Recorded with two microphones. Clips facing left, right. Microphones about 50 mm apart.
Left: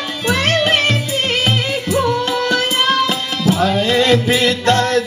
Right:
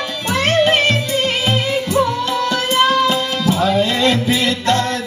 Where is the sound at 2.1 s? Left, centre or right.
Left.